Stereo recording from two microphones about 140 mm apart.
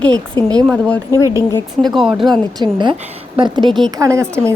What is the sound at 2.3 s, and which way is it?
A woman's voice, 30° right (ahead or behind).